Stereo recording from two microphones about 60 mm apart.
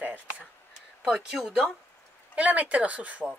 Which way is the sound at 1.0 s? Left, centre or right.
Centre.